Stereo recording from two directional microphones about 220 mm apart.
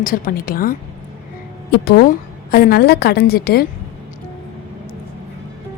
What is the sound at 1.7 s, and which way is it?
A woman's voice, 45° left (ahead or behind).